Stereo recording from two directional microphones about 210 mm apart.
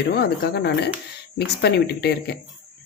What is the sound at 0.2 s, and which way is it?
Speech, 50° left (ahead or behind).